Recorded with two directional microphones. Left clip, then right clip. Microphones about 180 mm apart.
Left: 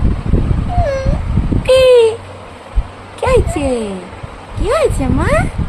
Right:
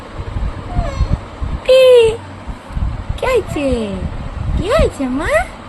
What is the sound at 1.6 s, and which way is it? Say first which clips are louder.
Speech: even; 20° left (ahead or behind).